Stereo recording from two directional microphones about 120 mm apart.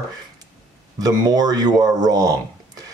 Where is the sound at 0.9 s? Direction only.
35° right (ahead or behind).